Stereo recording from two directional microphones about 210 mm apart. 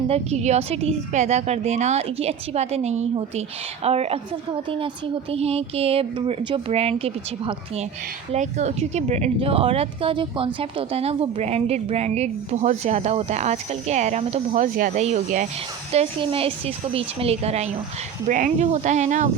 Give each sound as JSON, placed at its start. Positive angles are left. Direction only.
{"t": 0.1, "sound": "a woman's voice", "side_deg": -30}